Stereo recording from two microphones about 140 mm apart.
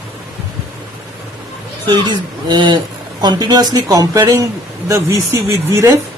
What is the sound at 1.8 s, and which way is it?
Speech, 35° right (ahead or behind).